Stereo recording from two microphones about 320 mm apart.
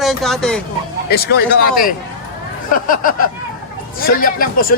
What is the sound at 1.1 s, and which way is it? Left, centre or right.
Speech, left.